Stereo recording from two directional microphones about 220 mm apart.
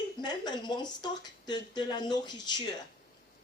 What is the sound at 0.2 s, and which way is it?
Speech, 20° left (ahead or behind).